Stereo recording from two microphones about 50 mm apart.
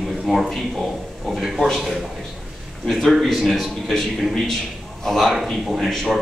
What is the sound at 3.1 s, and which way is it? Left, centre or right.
A man's voice, centre.